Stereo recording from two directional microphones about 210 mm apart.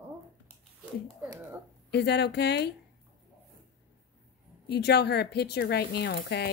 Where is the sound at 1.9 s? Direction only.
50° left (ahead or behind).